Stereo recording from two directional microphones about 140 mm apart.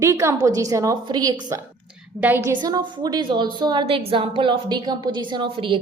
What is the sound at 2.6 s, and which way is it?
A woman's voice, 25° right (ahead or behind).